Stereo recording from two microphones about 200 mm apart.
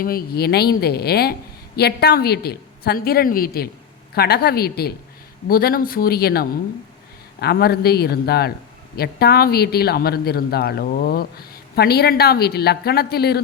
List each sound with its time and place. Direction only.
0.0 s speech: 50° left (ahead or behind)